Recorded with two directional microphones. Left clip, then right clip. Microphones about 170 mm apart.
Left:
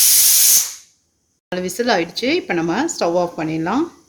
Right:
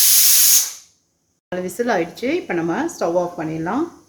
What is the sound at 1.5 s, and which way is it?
Speech, 35° left (ahead or behind).